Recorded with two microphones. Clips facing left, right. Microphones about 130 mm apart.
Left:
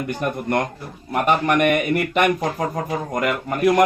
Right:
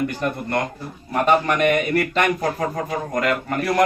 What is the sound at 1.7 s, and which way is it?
A man's voice, 20° left (ahead or behind).